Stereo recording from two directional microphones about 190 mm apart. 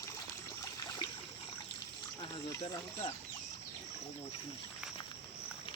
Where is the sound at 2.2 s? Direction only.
20° left (ahead or behind).